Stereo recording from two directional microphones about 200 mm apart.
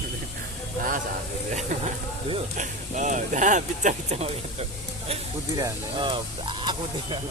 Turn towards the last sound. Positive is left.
turn(degrees=-25)  # may be behind; listen again after turning